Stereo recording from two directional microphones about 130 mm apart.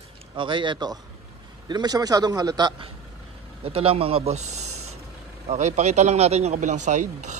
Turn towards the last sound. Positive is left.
turn(degrees=-65)  # may be behind; listen again after turning